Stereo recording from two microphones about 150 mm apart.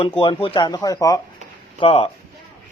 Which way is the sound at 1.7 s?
40° left (ahead or behind).